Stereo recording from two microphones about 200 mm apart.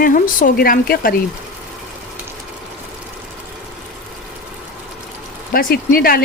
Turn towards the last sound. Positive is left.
turn(degrees=45)  # may be behind; listen again after turning